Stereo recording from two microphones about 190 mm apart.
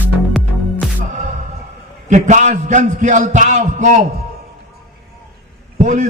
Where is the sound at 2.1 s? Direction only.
40° right (ahead or behind).